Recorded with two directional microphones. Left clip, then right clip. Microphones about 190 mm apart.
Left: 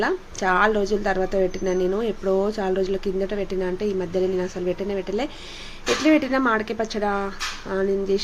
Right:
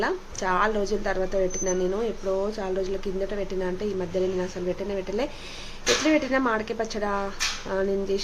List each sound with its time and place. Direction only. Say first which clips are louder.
0.0 s speech: left 4 dB; 15° left (ahead or behind)